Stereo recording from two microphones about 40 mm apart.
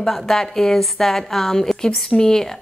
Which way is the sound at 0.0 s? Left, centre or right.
Centre.